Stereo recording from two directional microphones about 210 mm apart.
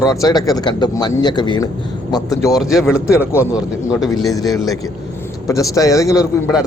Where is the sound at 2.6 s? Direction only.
Centre (ahead or behind).